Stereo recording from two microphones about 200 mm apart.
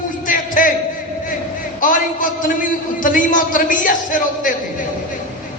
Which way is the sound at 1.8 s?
40° left (ahead or behind).